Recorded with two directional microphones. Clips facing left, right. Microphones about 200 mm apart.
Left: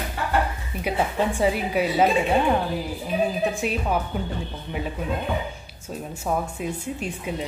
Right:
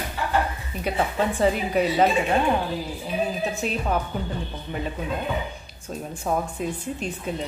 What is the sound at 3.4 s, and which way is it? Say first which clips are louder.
Speech: left 2 dB; 10° left (ahead or behind).